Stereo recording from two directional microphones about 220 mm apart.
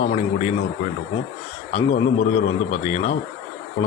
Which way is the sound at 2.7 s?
30° left (ahead or behind).